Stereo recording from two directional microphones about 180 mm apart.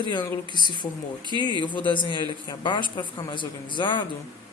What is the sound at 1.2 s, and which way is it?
Speech, 25° right (ahead or behind).